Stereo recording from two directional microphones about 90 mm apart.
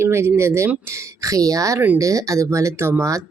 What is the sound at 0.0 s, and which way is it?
Speech, 30° right (ahead or behind).